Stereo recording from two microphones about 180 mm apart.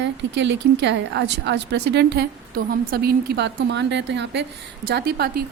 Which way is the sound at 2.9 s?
60° right (ahead or behind).